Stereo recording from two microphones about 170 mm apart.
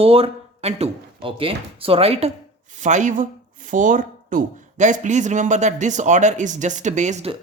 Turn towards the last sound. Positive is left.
turn(degrees=-40)  # may be behind; listen again after turning